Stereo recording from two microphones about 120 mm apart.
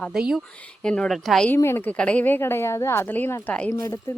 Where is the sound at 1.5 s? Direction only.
20° left (ahead or behind).